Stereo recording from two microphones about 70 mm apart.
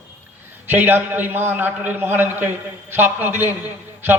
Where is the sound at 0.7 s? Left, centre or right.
Right.